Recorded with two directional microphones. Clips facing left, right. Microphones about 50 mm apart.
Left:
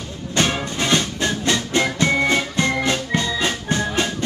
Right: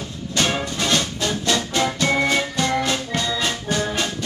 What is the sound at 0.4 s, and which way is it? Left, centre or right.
Music, left.